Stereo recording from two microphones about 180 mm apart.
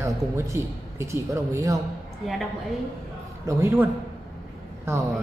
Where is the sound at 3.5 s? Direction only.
15° right (ahead or behind).